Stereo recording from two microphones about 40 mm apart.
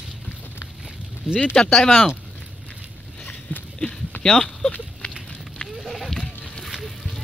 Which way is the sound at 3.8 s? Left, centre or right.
Centre.